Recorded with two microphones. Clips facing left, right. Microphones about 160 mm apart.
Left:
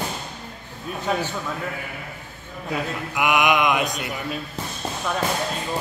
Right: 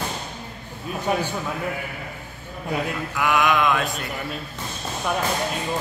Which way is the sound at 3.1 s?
20° left (ahead or behind).